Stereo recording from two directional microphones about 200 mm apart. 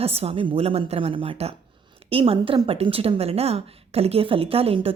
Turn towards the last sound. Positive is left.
turn(degrees=-30)  # may be behind; listen again after turning